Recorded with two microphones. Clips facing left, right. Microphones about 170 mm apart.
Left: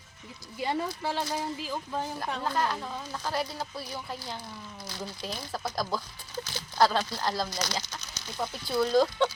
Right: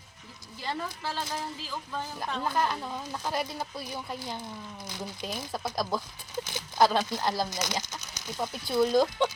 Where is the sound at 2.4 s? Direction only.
10° right (ahead or behind).